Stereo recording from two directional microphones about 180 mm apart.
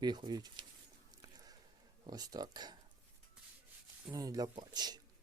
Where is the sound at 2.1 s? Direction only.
20° right (ahead or behind).